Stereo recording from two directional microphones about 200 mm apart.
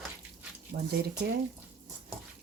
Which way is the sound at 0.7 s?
50° right (ahead or behind).